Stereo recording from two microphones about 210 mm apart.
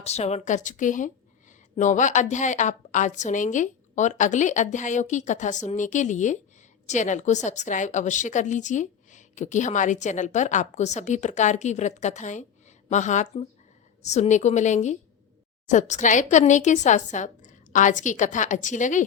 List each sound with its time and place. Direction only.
0.0 s a woman's voice: 30° left (ahead or behind)